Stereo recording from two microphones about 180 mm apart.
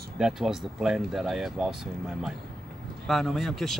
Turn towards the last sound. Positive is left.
turn(degrees=0)  # may be behind; listen again after turning